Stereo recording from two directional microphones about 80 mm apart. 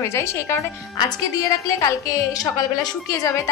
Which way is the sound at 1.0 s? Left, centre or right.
Left.